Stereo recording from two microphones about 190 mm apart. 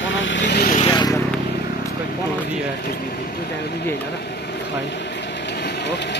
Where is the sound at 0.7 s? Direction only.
25° left (ahead or behind).